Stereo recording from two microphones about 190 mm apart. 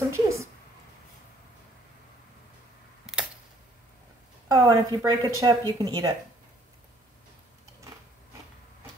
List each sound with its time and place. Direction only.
0.1 s a woman's voice: 15° right (ahead or behind)
3.1 s camera: 5° right (ahead or behind)
4.5 s a woman's voice: 20° right (ahead or behind)